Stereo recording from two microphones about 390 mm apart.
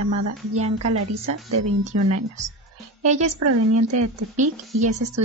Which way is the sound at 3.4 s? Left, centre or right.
Right.